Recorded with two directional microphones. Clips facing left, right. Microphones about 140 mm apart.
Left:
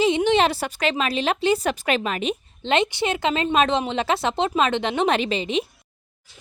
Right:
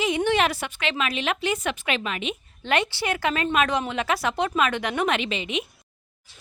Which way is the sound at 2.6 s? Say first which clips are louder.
Left 3 dB; 20° left (ahead or behind).